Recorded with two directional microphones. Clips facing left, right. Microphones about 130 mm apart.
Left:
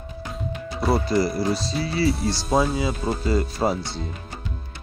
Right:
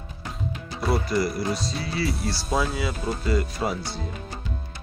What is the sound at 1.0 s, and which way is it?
Speech, 30° left (ahead or behind).